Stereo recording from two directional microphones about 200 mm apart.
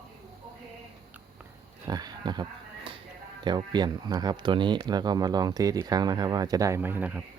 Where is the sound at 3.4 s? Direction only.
20° right (ahead or behind).